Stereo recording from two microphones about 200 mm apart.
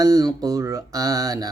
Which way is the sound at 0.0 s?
20° right (ahead or behind).